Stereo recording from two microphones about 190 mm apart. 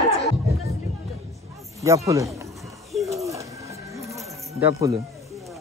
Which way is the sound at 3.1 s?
15° right (ahead or behind).